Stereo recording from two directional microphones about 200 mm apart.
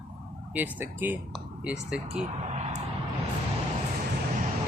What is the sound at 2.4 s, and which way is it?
Vehicle, 30° right (ahead or behind).